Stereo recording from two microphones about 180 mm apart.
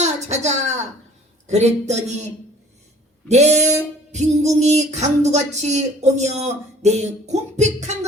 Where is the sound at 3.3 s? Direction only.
40° right (ahead or behind).